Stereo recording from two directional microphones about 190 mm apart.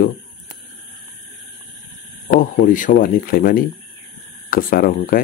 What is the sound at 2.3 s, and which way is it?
Speech, 45° left (ahead or behind).